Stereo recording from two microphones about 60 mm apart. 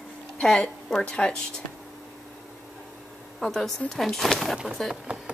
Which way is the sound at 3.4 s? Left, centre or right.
Centre.